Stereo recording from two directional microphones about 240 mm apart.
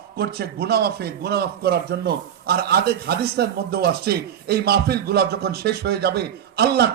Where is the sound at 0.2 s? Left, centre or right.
Right.